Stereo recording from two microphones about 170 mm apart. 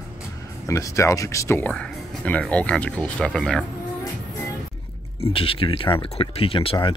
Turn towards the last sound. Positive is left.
turn(degrees=30)  # may be behind; listen again after turning